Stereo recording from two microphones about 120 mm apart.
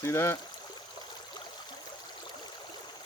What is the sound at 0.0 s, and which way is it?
Speech, 25° left (ahead or behind).